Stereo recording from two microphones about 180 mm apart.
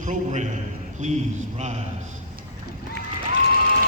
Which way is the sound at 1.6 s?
40° right (ahead or behind).